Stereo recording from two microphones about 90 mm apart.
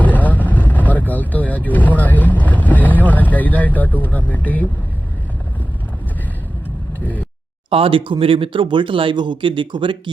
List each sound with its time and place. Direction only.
0.0 s vehicle: 20° left (ahead or behind)
2.0 s boat: 20° left (ahead or behind)
7.7 s speech: 85° right; by 10.0 s 65° right (ahead or behind)